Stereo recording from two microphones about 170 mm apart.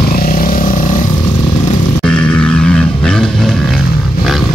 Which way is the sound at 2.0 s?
5° left (ahead or behind).